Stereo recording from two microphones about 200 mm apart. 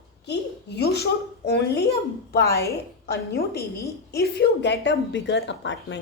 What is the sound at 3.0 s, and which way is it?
A woman's voice, 55° left (ahead or behind).